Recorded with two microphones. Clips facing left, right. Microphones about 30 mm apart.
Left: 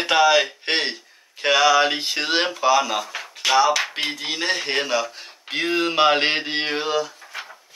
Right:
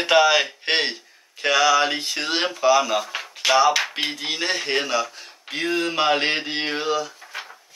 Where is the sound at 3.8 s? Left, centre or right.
Centre.